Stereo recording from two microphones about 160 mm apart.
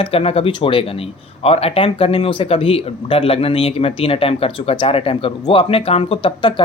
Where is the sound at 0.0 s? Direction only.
35° left (ahead or behind).